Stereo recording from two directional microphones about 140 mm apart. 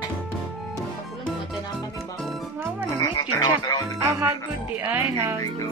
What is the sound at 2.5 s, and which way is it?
Music, 10° right (ahead or behind).